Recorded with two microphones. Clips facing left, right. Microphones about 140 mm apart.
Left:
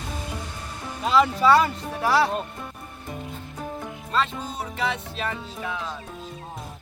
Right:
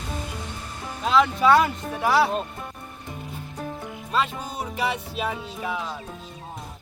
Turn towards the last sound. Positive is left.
turn(degrees=-10)  # may be behind; listen again after turning